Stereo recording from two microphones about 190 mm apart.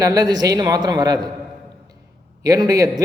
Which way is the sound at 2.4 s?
20° right (ahead or behind).